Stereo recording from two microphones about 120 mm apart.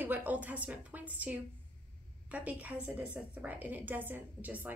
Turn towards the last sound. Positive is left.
turn(degrees=-15)  # may be behind; listen again after turning